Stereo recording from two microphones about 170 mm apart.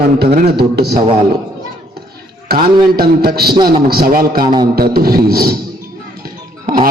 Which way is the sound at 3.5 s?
25° right (ahead or behind).